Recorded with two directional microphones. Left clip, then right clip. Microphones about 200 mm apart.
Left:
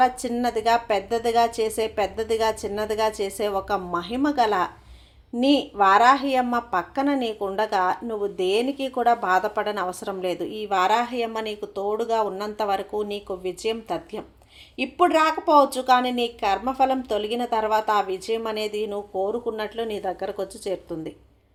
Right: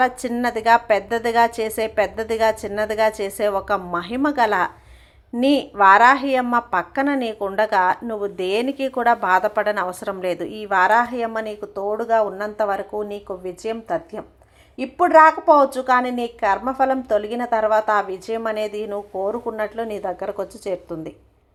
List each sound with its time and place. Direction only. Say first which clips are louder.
0.0 s a woman's voice: right 1 dB; 15° right (ahead or behind)